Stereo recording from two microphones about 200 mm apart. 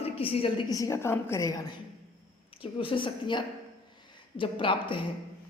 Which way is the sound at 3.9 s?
25° left (ahead or behind).